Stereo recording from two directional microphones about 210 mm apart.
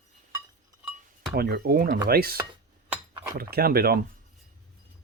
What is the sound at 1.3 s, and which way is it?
Speech, 50° right (ahead or behind).